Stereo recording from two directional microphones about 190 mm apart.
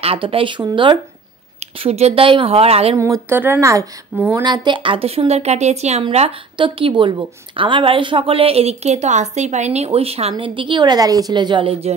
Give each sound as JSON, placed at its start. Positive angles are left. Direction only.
{"t": 0.0, "sound": "speech", "side_deg": -30}
{"t": 3.0, "sound": "speech", "side_deg": -15}